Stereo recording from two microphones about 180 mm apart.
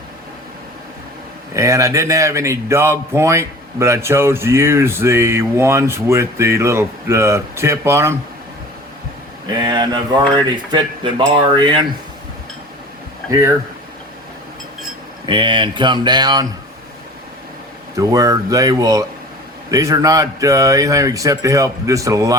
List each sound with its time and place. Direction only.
1.5 s a man's voice: 15° right (ahead or behind)
9.6 s a man's voice: 25° right (ahead or behind)
13.3 s a man's voice: 15° right (ahead or behind)
15.3 s a man's voice: 25° right (ahead or behind)
17.9 s a man's voice: 20° right (ahead or behind)